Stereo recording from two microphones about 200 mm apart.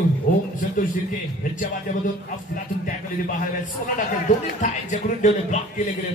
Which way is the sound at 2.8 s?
45° left (ahead or behind).